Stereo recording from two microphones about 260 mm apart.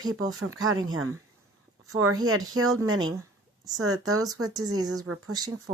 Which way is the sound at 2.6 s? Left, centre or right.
Right.